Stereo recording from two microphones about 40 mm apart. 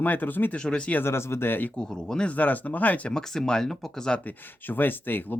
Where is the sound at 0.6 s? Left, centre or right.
Left.